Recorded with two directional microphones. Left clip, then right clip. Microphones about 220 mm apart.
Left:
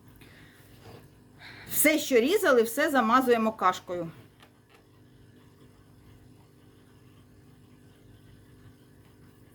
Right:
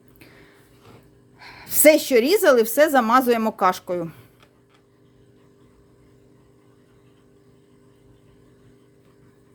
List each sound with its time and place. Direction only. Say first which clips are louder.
1.4 s a woman's voice: right 8 dB; 40° right (ahead or behind)